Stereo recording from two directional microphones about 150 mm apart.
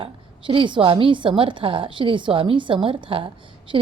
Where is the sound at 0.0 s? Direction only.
35° right (ahead or behind).